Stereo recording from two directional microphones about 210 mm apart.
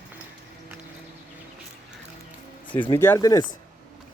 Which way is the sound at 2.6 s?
25° left (ahead or behind).